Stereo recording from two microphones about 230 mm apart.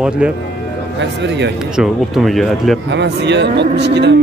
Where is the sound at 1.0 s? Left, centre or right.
Right.